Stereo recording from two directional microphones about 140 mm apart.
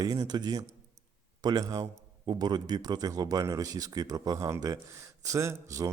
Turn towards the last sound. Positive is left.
turn(degrees=-20)  # may be behind; listen again after turning